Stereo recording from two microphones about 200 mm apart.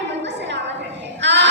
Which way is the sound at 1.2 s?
60° right (ahead or behind).